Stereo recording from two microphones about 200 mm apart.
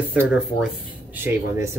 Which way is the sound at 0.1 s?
5° right (ahead or behind).